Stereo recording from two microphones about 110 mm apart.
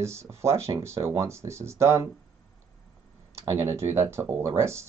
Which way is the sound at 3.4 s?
30° right (ahead or behind).